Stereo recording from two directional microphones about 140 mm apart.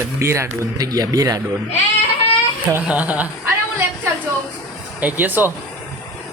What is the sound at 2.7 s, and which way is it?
Speech, 10° right (ahead or behind).